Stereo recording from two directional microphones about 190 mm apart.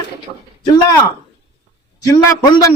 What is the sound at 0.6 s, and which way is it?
Speech, 20° left (ahead or behind).